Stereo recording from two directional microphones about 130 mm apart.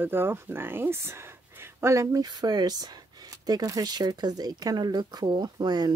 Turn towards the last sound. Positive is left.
turn(degrees=-30)  # may be behind; listen again after turning